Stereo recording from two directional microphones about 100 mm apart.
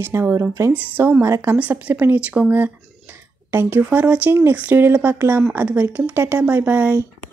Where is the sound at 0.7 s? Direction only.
15° right (ahead or behind).